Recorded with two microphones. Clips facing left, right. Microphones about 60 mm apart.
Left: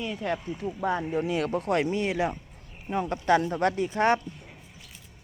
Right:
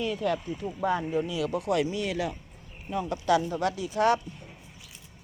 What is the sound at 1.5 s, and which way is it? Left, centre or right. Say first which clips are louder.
Speech: left 1 dB; left.